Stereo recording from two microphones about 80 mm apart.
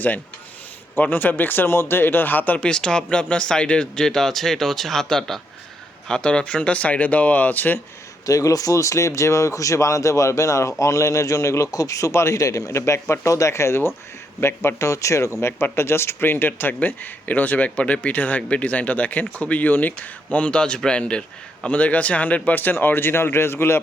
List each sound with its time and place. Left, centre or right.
0.9 s speech: left
8.3 s speech: left